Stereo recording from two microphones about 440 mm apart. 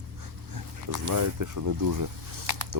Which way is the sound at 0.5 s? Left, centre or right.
Right.